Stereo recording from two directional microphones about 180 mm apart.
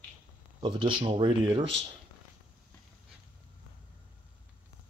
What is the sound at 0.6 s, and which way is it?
Speech, 25° right (ahead or behind).